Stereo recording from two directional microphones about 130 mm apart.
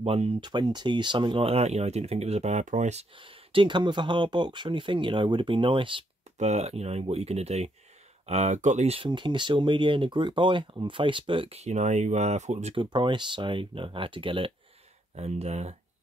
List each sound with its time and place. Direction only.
0.0 s speech: 50° right (ahead or behind)
0.4 s speech: 35° right (ahead or behind); by 3.1 s 60° right (ahead or behind)
3.2 s speech: 40° right (ahead or behind)
6.3 s speech: 60° right (ahead or behind)
12.7 s speech: 40° right (ahead or behind)
15.1 s speech: 55° right (ahead or behind)